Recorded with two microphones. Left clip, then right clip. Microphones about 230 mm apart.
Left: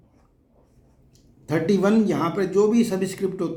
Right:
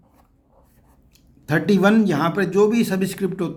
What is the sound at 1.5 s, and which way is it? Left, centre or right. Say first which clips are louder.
Speech: right 3 dB; right.